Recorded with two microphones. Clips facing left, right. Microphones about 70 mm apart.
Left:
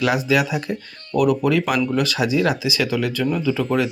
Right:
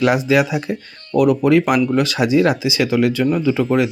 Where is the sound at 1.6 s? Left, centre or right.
Centre.